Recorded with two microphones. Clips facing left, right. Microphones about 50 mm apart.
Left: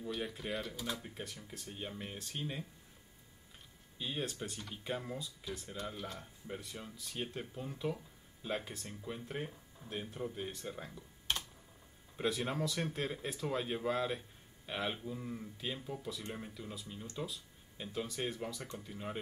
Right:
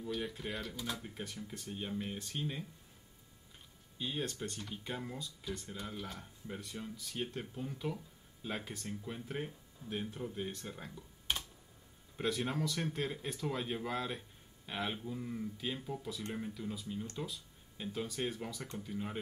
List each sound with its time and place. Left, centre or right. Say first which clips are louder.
0.1 s speech: even; centre
4.0 s speech: right 1 dB; centre
12.2 s speech: even; centre